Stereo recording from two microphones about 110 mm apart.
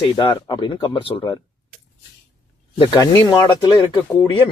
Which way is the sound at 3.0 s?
40° left (ahead or behind).